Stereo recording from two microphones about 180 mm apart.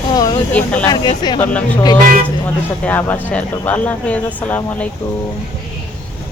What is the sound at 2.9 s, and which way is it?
Speech, 10° left (ahead or behind).